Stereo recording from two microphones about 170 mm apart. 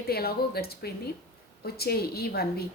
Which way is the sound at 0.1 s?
65° left (ahead or behind).